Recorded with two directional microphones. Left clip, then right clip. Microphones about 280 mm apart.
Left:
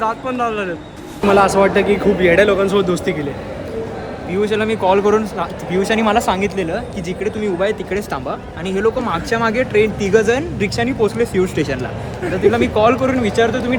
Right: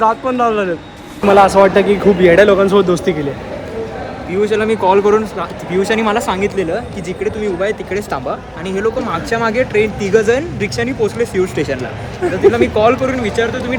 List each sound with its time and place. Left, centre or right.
0.0 s a man's voice: centre
4.3 s speech: centre